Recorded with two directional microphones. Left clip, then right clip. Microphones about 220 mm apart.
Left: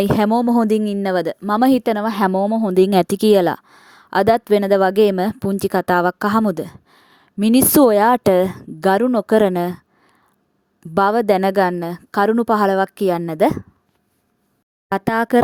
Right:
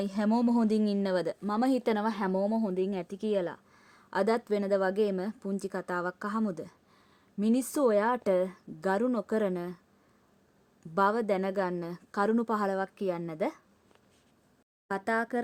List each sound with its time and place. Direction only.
0.0 s speech: 40° left (ahead or behind)
10.9 s speech: 40° left (ahead or behind)
14.8 s speech: 40° left (ahead or behind)